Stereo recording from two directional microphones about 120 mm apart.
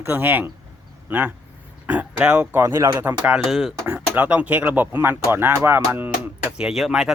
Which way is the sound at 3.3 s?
Centre (ahead or behind).